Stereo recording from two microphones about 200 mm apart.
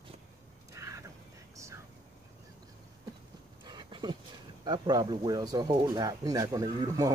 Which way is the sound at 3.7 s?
20° right (ahead or behind).